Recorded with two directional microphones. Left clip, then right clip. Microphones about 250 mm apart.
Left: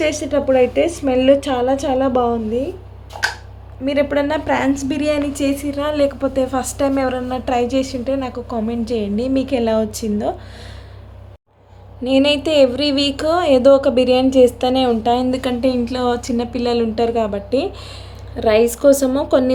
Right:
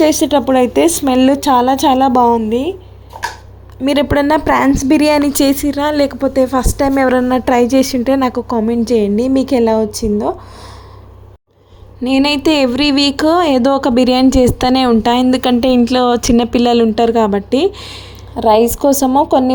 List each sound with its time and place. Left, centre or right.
0.0 s speech: right
3.8 s speech: right
12.0 s speech: right